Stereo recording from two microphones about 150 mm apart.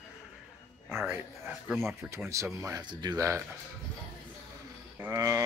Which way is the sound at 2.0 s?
20° right (ahead or behind).